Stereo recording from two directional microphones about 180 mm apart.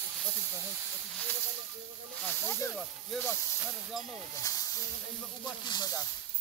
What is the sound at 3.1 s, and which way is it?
Speech, centre (ahead or behind).